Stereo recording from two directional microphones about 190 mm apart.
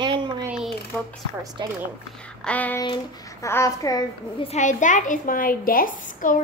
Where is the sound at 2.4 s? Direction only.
10° left (ahead or behind).